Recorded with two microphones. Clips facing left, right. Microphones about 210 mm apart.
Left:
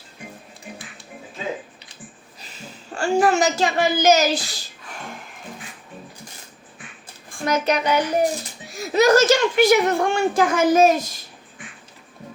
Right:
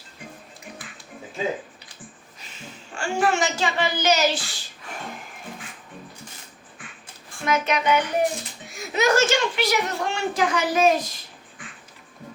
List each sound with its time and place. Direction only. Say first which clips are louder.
2.9 s a woman's voice: left 5 dB; 40° left (ahead or behind)
7.4 s a woman's voice: left 2 dB; 35° left (ahead or behind)